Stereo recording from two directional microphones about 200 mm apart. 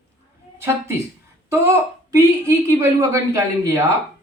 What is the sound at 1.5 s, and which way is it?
A woman's voice, 15° right (ahead or behind).